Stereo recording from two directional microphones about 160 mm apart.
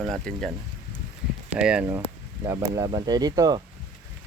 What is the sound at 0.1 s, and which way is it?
Speech, 5° left (ahead or behind).